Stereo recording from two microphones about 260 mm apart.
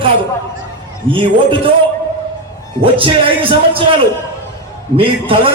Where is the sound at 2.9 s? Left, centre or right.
Centre.